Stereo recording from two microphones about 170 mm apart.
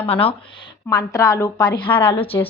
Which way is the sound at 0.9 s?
20° left (ahead or behind).